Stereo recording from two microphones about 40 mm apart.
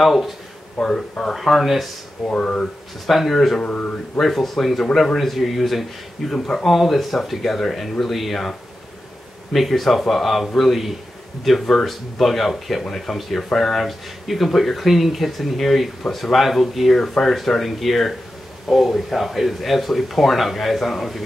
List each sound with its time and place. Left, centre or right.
0.0 s speech: centre
2.2 s speech: left
3.1 s speech: centre
3.6 s speech: left
4.3 s speech: centre
6.3 s speech: centre
6.6 s speech: centre
13.8 s speech: centre
17.1 s speech: centre
17.4 s speech: centre